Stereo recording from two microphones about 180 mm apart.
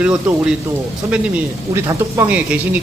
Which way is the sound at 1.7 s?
15° right (ahead or behind).